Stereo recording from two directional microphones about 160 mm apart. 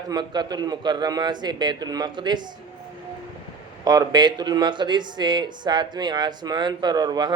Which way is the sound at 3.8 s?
25° right (ahead or behind).